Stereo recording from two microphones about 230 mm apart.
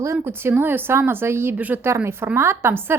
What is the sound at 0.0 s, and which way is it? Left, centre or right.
Speech, centre.